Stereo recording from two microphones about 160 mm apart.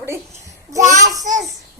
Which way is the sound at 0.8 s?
50° right (ahead or behind).